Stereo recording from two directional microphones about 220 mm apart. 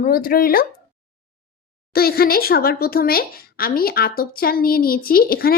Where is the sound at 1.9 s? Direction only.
45° left (ahead or behind).